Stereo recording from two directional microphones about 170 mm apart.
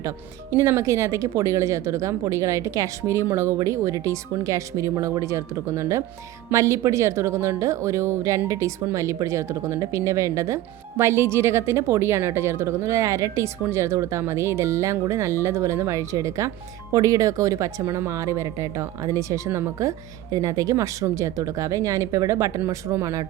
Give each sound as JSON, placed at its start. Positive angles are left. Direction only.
{"t": 0.5, "sound": "a woman's voice", "side_deg": -15}